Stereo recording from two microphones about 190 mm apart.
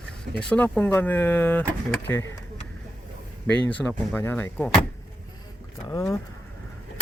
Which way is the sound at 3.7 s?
10° left (ahead or behind).